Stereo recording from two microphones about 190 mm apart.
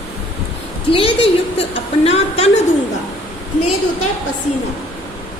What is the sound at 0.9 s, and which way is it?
A woman's voice, 30° left (ahead or behind).